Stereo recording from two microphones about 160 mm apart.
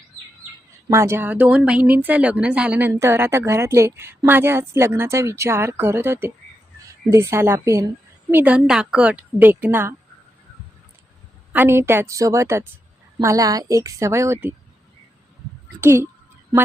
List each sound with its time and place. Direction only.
0.9 s a woman's voice: 15° right (ahead or behind)
11.5 s a woman's voice: 15° right (ahead or behind)
15.8 s a woman's voice: 15° right (ahead or behind)